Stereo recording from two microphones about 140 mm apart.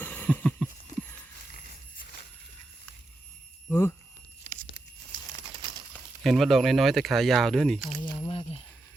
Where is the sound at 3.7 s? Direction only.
15° left (ahead or behind).